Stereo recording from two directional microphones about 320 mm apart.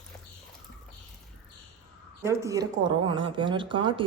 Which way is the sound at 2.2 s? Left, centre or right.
Centre.